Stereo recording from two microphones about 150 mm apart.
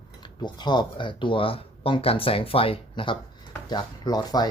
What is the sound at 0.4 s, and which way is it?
Speech, 30° left (ahead or behind).